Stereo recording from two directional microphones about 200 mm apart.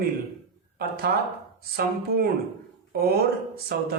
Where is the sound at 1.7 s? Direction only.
50° right (ahead or behind).